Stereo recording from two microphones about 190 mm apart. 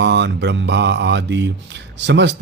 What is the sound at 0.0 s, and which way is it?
Speech, 65° right (ahead or behind).